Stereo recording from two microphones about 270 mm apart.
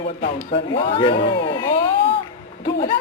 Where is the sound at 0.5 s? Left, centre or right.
Centre.